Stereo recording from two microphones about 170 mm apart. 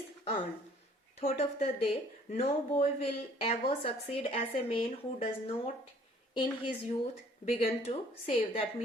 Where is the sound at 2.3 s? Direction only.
40° left (ahead or behind).